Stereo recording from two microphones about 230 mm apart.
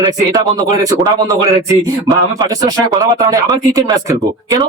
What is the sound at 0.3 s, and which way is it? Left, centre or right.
Speech, centre.